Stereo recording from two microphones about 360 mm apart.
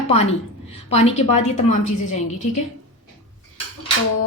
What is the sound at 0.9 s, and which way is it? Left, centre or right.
A woman's voice, centre.